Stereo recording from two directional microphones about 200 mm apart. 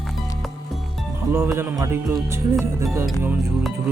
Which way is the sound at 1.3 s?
10° right (ahead or behind).